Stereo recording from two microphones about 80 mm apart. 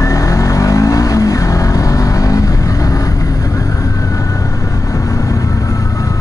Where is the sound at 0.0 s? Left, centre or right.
Left.